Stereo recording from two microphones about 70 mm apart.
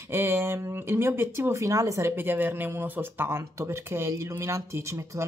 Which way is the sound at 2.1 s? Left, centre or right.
Right.